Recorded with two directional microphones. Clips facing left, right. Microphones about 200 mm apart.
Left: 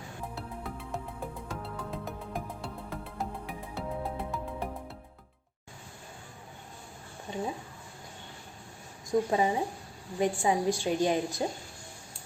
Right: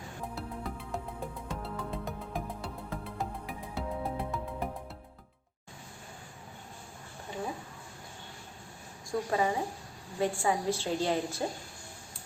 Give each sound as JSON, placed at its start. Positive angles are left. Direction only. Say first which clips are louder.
{"t": 0.3, "sound": "music", "louder": "right 2 dB", "side_deg": 0}
{"t": 9.0, "sound": "a woman's voice", "louder": "left 3 dB", "side_deg": 20}